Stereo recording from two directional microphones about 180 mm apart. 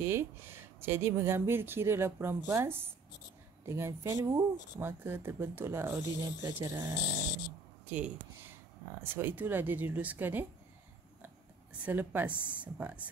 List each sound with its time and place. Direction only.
0.0 s speech: 15° right (ahead or behind)
7.9 s a sound: 10° right (ahead or behind)
9.0 s speech: 10° right (ahead or behind)
11.8 s speech: 10° right (ahead or behind)